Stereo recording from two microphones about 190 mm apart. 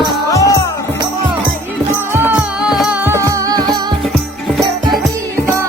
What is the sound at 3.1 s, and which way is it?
Music, 20° right (ahead or behind).